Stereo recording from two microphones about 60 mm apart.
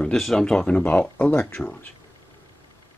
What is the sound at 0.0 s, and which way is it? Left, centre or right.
Speech, centre.